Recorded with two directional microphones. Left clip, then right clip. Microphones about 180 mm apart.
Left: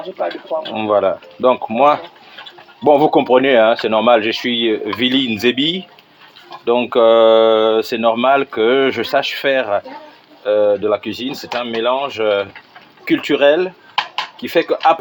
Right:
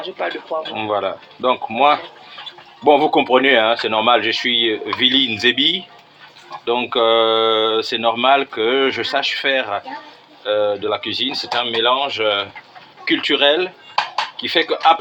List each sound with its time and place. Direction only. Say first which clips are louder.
0.7 s speech: left 7 dB; 45° left (ahead or behind)